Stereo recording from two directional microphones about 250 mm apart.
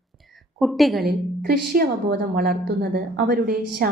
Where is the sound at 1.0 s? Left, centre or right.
Right.